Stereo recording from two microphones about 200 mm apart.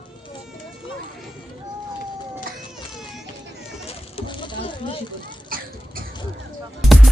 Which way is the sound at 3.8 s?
25° left (ahead or behind).